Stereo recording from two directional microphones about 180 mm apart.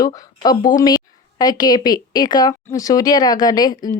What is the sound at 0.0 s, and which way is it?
A woman's voice, 20° left (ahead or behind).